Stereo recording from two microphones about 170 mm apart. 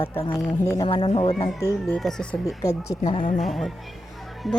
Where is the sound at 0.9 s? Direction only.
35° left (ahead or behind).